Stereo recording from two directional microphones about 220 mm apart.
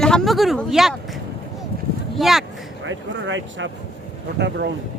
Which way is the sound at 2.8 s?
60° right (ahead or behind).